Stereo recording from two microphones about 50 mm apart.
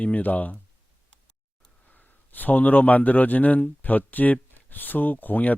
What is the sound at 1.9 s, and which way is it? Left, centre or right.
A man's voice, left.